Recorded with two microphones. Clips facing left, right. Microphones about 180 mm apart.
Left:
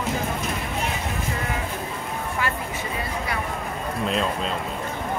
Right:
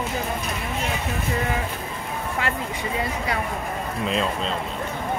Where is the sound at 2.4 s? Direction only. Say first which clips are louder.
Even; 25° right (ahead or behind).